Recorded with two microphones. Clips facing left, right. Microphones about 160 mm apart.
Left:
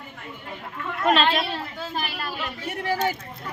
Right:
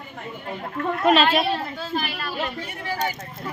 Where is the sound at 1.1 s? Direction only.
5° right (ahead or behind).